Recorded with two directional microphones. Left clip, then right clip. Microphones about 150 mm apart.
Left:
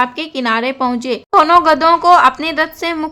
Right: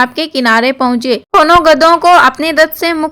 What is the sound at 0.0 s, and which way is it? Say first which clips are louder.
A woman's voice: right 5 dB; 35° right (ahead or behind).